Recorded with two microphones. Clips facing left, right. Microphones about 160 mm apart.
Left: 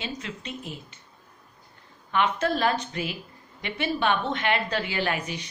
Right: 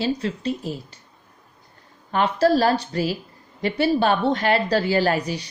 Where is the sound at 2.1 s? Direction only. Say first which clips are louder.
Right 6 dB; 35° right (ahead or behind).